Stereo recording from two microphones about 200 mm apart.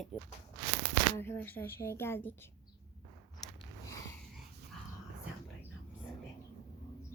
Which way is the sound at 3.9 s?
15° left (ahead or behind).